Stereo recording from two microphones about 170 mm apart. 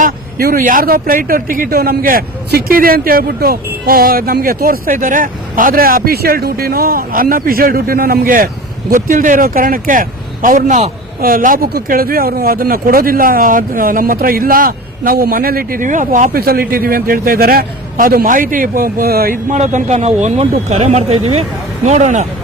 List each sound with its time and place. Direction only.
0.0 s a man's voice: 60° right (ahead or behind)
11.2 s a man's voice: 55° right (ahead or behind)